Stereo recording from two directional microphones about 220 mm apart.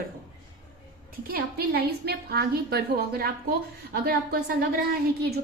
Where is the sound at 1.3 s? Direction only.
45° right (ahead or behind).